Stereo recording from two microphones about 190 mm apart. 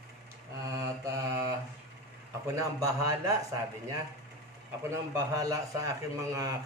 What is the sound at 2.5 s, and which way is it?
A man's voice, 15° right (ahead or behind).